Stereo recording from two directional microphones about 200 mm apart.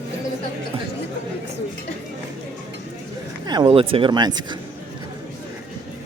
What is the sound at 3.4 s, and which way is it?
Speech, 25° right (ahead or behind).